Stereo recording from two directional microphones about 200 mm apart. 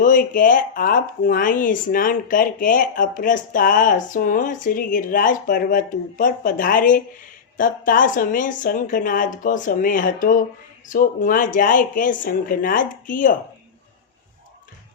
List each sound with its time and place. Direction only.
0.0 s speech: 40° left (ahead or behind)